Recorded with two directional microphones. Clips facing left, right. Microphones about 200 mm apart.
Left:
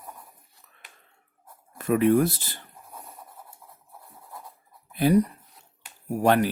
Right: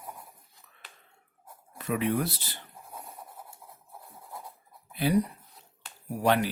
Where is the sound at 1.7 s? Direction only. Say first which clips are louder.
Left 8 dB; 50° left (ahead or behind).